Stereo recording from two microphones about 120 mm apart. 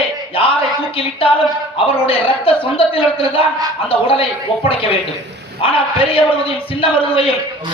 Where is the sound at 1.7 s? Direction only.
50° left (ahead or behind).